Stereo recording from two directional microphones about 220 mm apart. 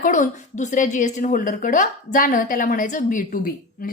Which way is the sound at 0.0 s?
35° left (ahead or behind).